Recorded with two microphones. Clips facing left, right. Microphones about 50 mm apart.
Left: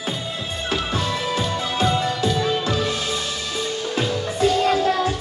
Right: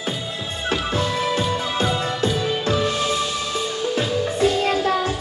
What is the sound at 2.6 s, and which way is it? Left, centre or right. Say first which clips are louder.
Music: right 2 dB; centre.